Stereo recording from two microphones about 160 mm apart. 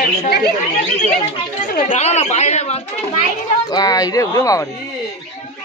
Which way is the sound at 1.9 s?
45° left (ahead or behind).